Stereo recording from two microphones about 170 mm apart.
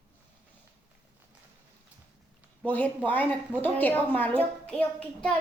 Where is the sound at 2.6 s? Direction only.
10° left (ahead or behind).